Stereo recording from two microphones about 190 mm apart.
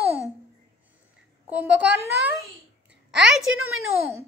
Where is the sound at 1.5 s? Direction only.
5° right (ahead or behind).